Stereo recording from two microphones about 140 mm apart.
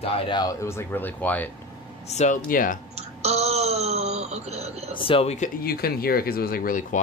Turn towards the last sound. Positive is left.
turn(degrees=80)